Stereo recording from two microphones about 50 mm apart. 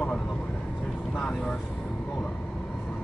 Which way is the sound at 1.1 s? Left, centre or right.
Centre.